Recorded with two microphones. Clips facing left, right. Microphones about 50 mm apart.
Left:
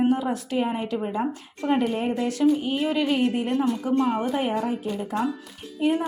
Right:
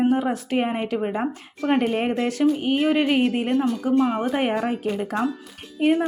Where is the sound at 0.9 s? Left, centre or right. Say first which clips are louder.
Right 2 dB; right.